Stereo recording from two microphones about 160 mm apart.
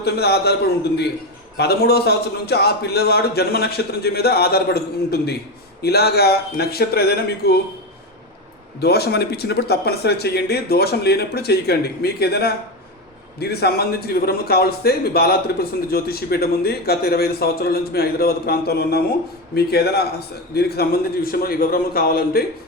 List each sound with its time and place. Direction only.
0.0 s a man's voice: 90° left
1.5 s a man's voice: 85° left
8.8 s a man's voice: 90° left; by 22.4 s 70° left (ahead or behind)